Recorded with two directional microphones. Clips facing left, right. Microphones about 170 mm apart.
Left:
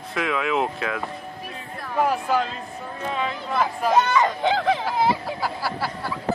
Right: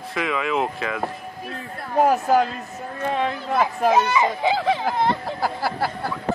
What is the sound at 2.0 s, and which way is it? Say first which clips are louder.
A child's voice: right 5 dB; 45° right (ahead or behind).